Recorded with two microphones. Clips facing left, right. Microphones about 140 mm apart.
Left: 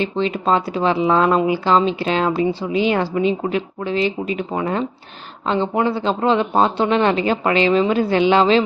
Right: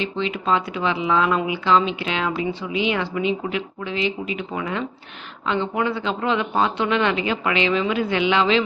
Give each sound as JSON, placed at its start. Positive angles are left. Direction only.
{"t": 0.0, "sound": "speech", "side_deg": 40}